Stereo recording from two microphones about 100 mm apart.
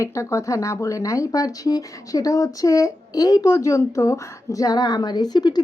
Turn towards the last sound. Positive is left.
turn(degrees=45)  # may be behind; listen again after turning